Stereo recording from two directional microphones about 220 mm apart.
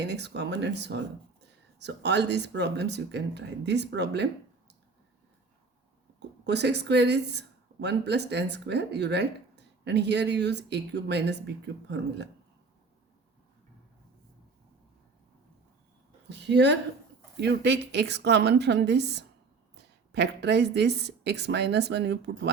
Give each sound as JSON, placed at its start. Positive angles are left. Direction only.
{"t": 0.0, "sound": "a woman's voice", "side_deg": -50}
{"t": 6.1, "sound": "a woman's voice", "side_deg": -50}
{"t": 16.4, "sound": "a woman's voice", "side_deg": -50}